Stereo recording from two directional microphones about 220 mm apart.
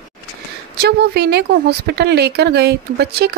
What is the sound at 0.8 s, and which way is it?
Speech, 45° right (ahead or behind).